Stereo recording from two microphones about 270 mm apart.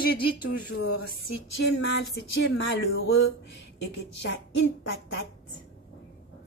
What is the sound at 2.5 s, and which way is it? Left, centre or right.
Speech, left.